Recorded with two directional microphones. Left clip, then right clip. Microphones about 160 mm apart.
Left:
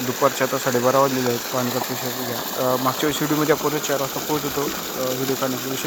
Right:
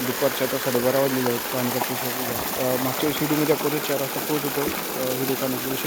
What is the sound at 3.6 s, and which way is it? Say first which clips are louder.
Speech: left 2 dB; 30° left (ahead or behind).